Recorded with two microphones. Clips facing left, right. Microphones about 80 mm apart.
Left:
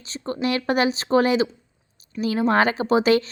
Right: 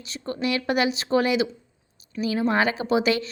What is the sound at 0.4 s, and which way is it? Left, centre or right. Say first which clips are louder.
A woman's voice: left 2 dB; left.